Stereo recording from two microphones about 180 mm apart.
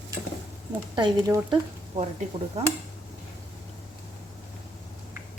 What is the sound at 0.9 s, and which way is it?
Speech, 20° right (ahead or behind).